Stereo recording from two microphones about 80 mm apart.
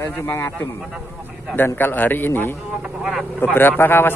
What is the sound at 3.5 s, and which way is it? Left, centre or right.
Speech, left.